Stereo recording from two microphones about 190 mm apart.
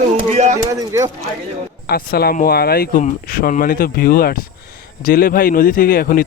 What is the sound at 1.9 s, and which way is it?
A man's voice, 55° left (ahead or behind).